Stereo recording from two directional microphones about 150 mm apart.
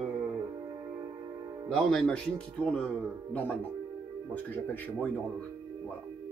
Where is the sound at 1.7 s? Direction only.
5° left (ahead or behind).